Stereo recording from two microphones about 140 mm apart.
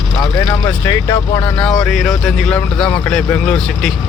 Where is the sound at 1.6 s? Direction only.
5° left (ahead or behind).